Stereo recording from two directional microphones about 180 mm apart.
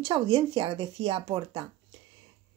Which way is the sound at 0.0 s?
30° right (ahead or behind).